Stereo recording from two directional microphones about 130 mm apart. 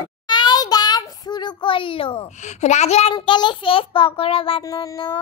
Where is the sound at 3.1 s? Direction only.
35° left (ahead or behind).